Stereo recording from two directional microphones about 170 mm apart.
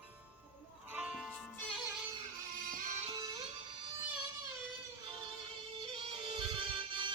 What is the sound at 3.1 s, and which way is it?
Music, 25° right (ahead or behind).